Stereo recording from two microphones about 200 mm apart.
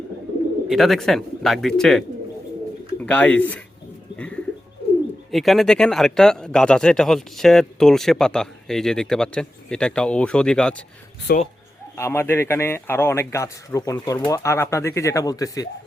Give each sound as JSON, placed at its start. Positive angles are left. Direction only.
{"t": 0.7, "sound": "speech", "side_deg": 0}
{"t": 3.1, "sound": "a man's voice", "side_deg": 5}
{"t": 4.2, "sound": "bird", "side_deg": 5}
{"t": 5.3, "sound": "speech", "side_deg": 0}
{"t": 11.3, "sound": "speech", "side_deg": 50}
{"t": 11.9, "sound": "a man's voice", "side_deg": 10}